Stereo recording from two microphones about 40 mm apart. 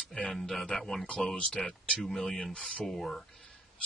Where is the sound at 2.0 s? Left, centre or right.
Centre; by 2.8 s left.